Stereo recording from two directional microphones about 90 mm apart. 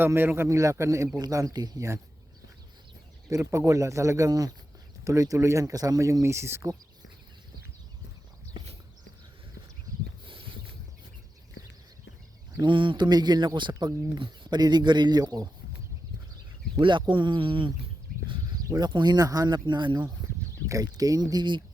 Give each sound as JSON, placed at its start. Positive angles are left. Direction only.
{"t": 0.0, "sound": "a man's voice", "side_deg": -25}
{"t": 0.4, "sound": "speech", "side_deg": -35}
{"t": 3.2, "sound": "speech", "side_deg": -35}
{"t": 10.2, "sound": "a sound", "side_deg": -75}
{"t": 12.6, "sound": "speech", "side_deg": -70}
{"t": 13.1, "sound": "speech", "side_deg": -50}
{"t": 16.8, "sound": "speech", "side_deg": -65}
{"t": 18.8, "sound": "speech", "side_deg": -50}
{"t": 20.7, "sound": "speech", "side_deg": -45}